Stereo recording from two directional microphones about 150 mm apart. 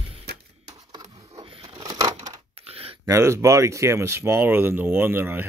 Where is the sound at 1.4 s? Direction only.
40° right (ahead or behind).